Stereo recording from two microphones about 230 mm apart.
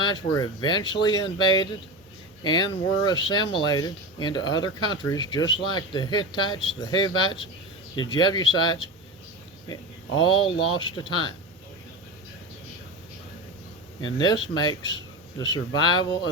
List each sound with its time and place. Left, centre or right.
0.0 s speech: centre
10.2 s speech: left
14.0 s speech: centre